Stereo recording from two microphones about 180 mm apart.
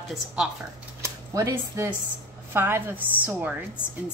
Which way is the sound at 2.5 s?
10° right (ahead or behind).